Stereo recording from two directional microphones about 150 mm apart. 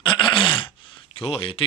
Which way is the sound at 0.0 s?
35° left (ahead or behind).